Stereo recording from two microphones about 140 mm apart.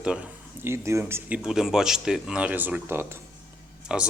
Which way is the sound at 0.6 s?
20° right (ahead or behind).